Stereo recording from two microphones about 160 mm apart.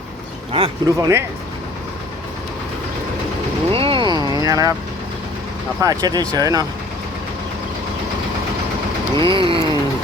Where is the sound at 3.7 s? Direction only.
35° right (ahead or behind).